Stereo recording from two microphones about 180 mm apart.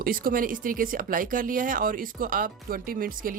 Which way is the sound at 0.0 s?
50° right (ahead or behind).